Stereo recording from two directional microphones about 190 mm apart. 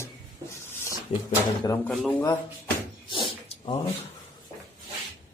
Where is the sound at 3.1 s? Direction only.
25° left (ahead or behind).